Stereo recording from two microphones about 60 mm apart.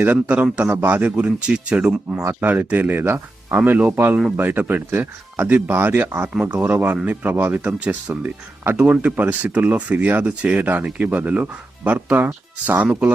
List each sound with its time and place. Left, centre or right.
0.0 s speech: right
1.1 s speech: centre
2.4 s speech: right